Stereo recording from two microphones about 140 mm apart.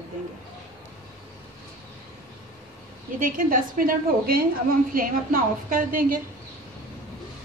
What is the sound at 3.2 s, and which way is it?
A woman's voice, 85° right.